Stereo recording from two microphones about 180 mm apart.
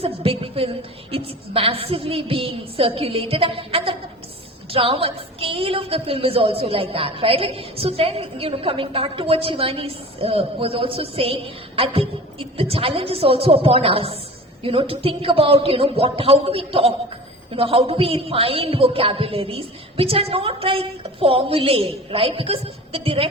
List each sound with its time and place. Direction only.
0.0 s a woman's voice: 30° right (ahead or behind)